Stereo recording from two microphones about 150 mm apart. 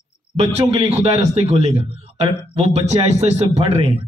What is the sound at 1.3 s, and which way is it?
Speech, 45° right (ahead or behind).